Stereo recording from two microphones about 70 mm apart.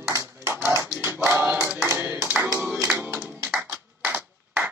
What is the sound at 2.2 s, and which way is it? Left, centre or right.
Clapping, right.